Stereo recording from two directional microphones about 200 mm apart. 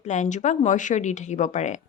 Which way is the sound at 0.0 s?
35° left (ahead or behind).